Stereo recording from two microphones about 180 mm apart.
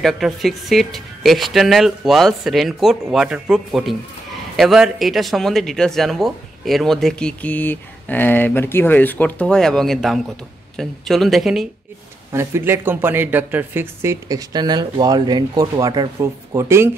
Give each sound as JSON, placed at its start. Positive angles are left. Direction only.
{"t": 0.0, "sound": "speech", "side_deg": 0}
{"t": 12.3, "sound": "speech", "side_deg": -15}